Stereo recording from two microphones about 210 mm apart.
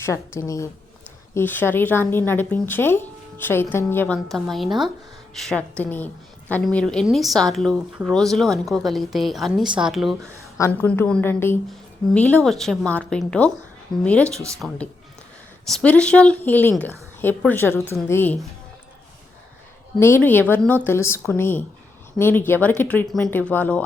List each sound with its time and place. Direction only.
0.0 s a woman's voice: 15° left (ahead or behind)
20.0 s a woman's voice: 10° left (ahead or behind)